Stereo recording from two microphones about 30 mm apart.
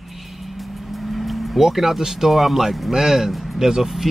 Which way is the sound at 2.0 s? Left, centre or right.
Centre.